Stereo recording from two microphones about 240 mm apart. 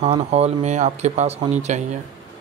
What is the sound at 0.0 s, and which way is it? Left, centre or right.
Speech, right.